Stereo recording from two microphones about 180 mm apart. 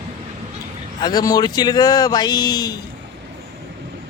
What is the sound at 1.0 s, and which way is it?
A man's voice, 20° left (ahead or behind).